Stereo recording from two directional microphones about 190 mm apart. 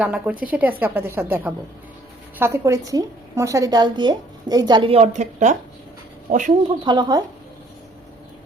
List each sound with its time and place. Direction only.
0.0 s a woman's voice: 5° right (ahead or behind); by 6.4 s 45° right (ahead or behind)
6.8 s a woman's voice: 20° right (ahead or behind)